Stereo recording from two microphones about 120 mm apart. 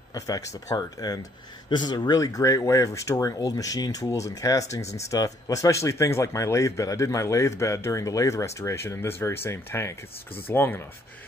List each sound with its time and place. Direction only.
0.1 s speech: 30° left (ahead or behind)